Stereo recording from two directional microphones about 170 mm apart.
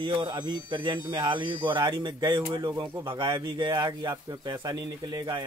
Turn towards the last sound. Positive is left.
turn(degrees=-25)  # may be behind; listen again after turning